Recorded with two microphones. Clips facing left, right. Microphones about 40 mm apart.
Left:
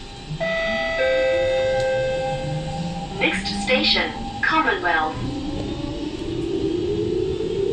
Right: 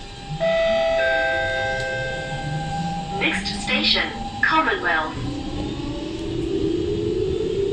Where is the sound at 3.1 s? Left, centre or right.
Centre.